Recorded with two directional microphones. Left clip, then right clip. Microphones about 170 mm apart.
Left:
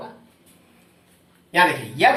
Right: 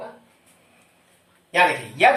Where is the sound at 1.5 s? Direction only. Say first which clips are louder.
Left 1 dB; 20° right (ahead or behind).